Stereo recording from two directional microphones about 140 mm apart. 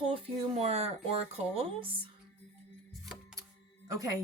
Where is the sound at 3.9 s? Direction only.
25° right (ahead or behind).